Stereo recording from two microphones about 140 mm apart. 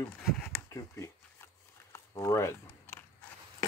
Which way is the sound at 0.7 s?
20° left (ahead or behind).